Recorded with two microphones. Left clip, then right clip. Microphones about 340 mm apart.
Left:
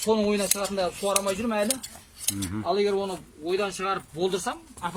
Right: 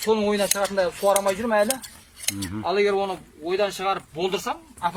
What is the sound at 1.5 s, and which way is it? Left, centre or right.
Cutlery, right.